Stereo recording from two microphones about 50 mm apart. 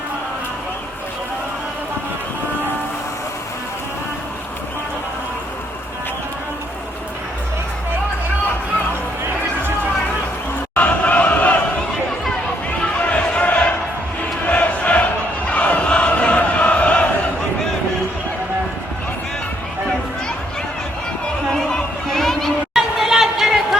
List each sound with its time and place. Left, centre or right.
10.8 s crowd: left
12.8 s basketball bounce: left
14.4 s crowd: left
22.1 s a sound: centre
22.7 s chatter: centre